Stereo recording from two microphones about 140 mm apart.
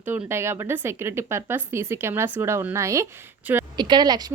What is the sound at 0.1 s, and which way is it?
Speech, 15° right (ahead or behind).